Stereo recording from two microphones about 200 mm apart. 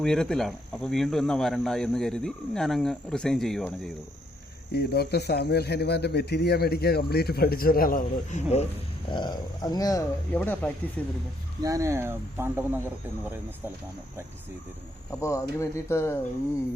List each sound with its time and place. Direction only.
0.0 s speech: 5° left (ahead or behind)
4.7 s speech: 50° left (ahead or behind); by 8.6 s 35° left (ahead or behind)
9.1 s speech: 20° left (ahead or behind)
10.3 s speech: 10° left (ahead or behind)
11.6 s speech: 15° right (ahead or behind)
15.1 s speech: 15° left (ahead or behind)